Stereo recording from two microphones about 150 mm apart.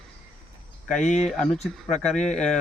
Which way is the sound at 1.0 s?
50° left (ahead or behind).